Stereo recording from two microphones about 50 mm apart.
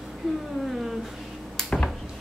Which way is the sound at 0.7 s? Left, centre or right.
Centre.